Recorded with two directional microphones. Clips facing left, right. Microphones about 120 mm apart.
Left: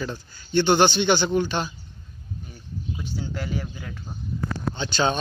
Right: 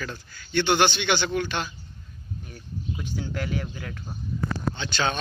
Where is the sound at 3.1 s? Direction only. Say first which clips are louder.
Even; 10° left (ahead or behind).